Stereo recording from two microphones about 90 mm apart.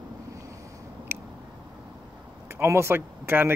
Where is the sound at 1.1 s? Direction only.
25° right (ahead or behind).